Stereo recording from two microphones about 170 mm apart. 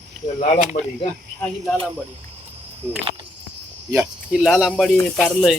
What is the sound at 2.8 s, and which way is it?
Speech, 10° right (ahead or behind).